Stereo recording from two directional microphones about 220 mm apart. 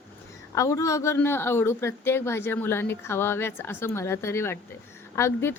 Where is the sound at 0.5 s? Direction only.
15° left (ahead or behind).